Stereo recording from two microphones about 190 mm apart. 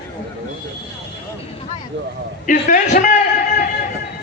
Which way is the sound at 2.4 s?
45° left (ahead or behind).